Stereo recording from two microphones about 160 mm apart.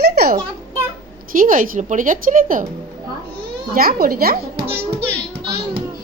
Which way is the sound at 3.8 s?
70° right (ahead or behind).